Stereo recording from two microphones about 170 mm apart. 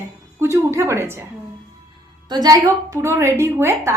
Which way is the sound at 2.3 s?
20° right (ahead or behind).